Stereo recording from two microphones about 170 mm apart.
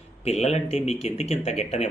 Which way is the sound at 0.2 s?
40° left (ahead or behind).